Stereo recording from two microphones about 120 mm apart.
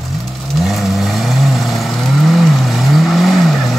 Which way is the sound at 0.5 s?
Centre (ahead or behind).